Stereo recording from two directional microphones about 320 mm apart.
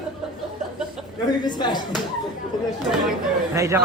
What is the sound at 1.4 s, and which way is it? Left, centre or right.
Speech, centre.